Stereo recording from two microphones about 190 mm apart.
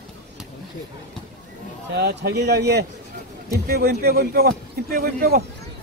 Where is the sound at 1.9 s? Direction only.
60° right (ahead or behind).